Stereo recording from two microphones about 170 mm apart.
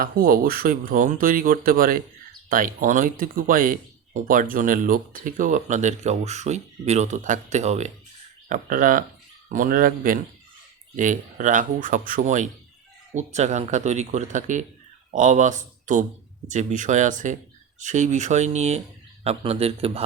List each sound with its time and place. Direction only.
0.0 s a man's voice: 60° right (ahead or behind); by 20.1 s 35° right (ahead or behind)